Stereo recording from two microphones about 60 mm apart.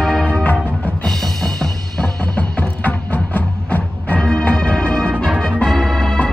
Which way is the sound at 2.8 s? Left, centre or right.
Left.